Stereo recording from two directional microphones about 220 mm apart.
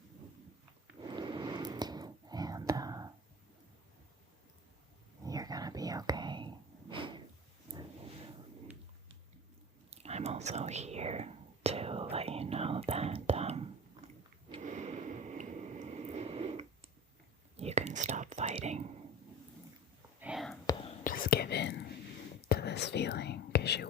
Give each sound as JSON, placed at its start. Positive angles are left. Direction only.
{"t": 1.0, "sound": "whispering", "side_deg": -20}
{"t": 5.2, "sound": "whispering", "side_deg": -15}
{"t": 9.9, "sound": "whispering", "side_deg": -30}
{"t": 14.5, "sound": "a sound", "side_deg": -35}
{"t": 17.6, "sound": "whispering", "side_deg": -30}
{"t": 20.1, "sound": "whispering", "side_deg": -5}
{"t": 21.0, "sound": "whispering", "side_deg": 40}